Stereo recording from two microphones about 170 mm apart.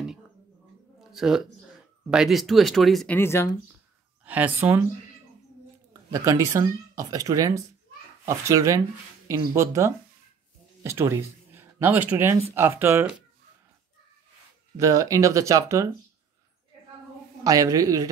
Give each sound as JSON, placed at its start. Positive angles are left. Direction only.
{"t": 1.1, "sound": "speech", "side_deg": 0}
{"t": 3.2, "sound": "speech", "side_deg": 15}
{"t": 4.2, "sound": "speech", "side_deg": -10}
{"t": 6.0, "sound": "speech", "side_deg": -20}
{"t": 14.8, "sound": "speech", "side_deg": -20}
{"t": 17.4, "sound": "speech", "side_deg": -20}